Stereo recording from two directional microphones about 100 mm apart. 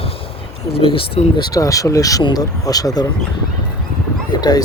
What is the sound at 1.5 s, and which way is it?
Speech, 35° left (ahead or behind).